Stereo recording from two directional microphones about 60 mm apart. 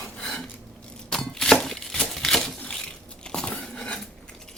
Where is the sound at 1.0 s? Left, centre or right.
Centre.